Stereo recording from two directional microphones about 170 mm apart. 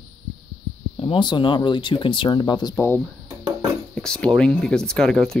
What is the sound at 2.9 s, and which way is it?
Dishes, 20° right (ahead or behind).